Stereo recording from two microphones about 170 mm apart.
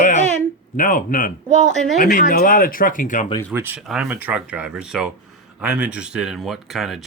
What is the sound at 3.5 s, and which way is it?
Speech, 10° right (ahead or behind).